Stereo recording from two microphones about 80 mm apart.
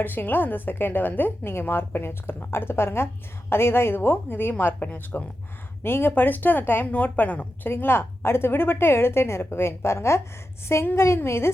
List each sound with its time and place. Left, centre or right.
0.0 s a woman's voice: left